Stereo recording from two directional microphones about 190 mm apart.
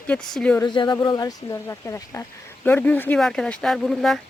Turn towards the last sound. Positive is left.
turn(degrees=0)  # may be behind; listen again after turning